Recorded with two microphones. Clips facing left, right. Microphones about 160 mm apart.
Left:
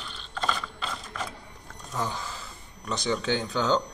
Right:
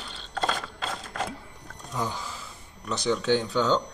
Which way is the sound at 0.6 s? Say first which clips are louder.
Right 2 dB; 55° right (ahead or behind).